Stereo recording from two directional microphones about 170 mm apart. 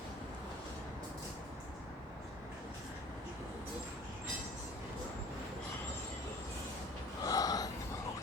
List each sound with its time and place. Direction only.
7.2 s gasp: 20° left (ahead or behind)